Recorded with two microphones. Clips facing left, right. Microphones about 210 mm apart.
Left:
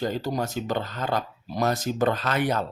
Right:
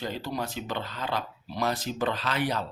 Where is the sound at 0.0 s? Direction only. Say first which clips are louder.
Left 5 dB; 45° left (ahead or behind).